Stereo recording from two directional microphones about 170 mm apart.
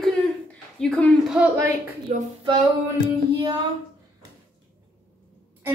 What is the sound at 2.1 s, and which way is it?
Speech, 45° right (ahead or behind).